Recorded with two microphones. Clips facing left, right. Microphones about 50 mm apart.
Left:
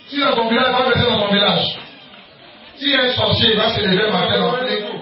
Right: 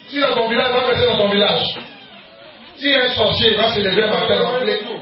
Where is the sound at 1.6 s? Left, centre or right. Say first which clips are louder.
Left 1 dB; right.